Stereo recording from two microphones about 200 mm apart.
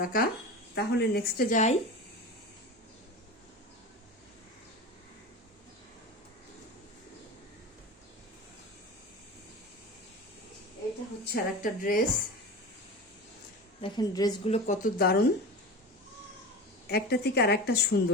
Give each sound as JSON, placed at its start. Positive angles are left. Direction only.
{"t": 0.0, "sound": "a woman's voice", "side_deg": 45}
{"t": 11.3, "sound": "a woman's voice", "side_deg": 45}
{"t": 13.8, "sound": "a woman's voice", "side_deg": 20}
{"t": 14.5, "sound": "a woman's voice", "side_deg": 40}
{"t": 16.8, "sound": "a woman's voice", "side_deg": 50}